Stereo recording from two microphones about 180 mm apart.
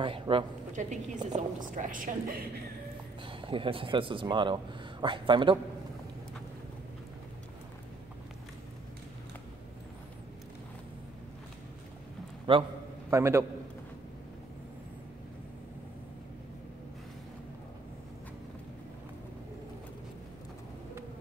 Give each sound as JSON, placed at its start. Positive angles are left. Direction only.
{"t": 0.0, "sound": "speech", "side_deg": -30}
{"t": 0.7, "sound": "a woman's voice", "side_deg": -40}
{"t": 3.3, "sound": "speech", "side_deg": -30}
{"t": 12.5, "sound": "speech", "side_deg": -30}
{"t": 13.1, "sound": "a man's voice", "side_deg": -15}